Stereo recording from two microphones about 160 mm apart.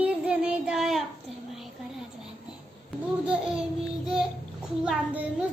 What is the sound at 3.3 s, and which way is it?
A child's voice, 5° right (ahead or behind).